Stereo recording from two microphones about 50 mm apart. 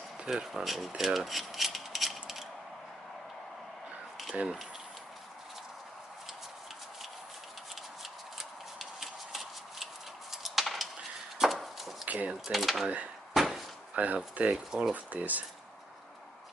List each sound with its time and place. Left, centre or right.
0.3 s speech: centre
0.7 s a sound: centre
8.4 s tick-tock: centre
10.3 s a sound: centre
11.3 s horse: centre
12.1 s speech: right
12.4 s speech: centre
13.3 s a sound: centre
13.9 s speech: right
14.7 s speech: centre
15.1 s speech: right